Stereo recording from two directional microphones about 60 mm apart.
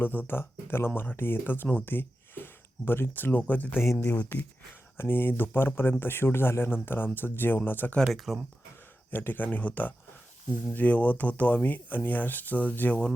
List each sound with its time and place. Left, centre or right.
0.0 s speech: left
8.1 s speech: centre
9.0 s speech: left